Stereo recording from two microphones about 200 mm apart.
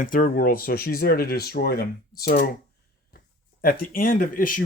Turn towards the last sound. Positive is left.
turn(degrees=45)  # may be behind; listen again after turning